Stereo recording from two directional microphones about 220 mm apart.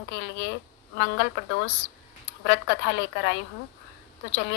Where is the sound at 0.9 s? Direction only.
55° left (ahead or behind).